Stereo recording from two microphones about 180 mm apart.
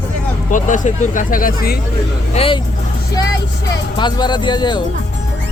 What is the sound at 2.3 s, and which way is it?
Speech, 35° left (ahead or behind).